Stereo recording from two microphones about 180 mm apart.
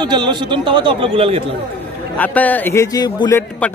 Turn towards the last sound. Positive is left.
turn(degrees=15)  # may be behind; listen again after turning